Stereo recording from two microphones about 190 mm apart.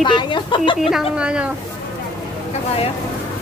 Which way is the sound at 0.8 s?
Centre (ahead or behind).